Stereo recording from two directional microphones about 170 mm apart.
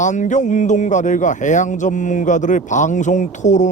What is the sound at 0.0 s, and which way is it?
Speech, 45° left (ahead or behind).